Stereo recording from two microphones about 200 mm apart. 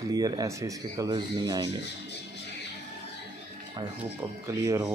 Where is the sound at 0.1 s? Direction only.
20° right (ahead or behind).